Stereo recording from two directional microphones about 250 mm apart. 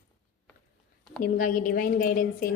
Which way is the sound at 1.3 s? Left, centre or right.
Left.